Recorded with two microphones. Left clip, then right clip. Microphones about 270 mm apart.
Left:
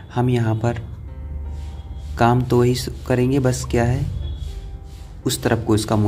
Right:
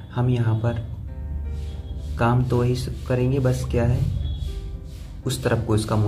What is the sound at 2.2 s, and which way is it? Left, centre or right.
Speech, left.